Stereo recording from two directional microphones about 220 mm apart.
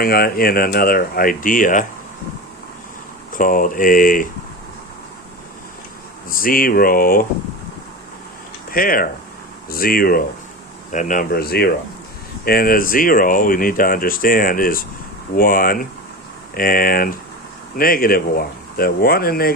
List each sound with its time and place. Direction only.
0.0 s speech: 40° left (ahead or behind)
3.3 s speech: 40° left (ahead or behind)
6.3 s speech: 40° left (ahead or behind)
8.7 s speech: 40° left (ahead or behind)